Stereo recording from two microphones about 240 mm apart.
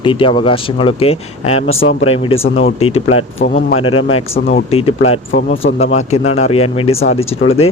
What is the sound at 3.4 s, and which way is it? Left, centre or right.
Speech, left.